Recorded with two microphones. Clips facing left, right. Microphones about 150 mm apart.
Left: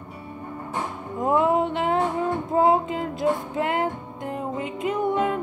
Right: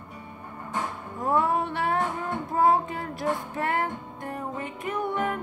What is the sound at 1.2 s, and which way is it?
Music, 20° left (ahead or behind).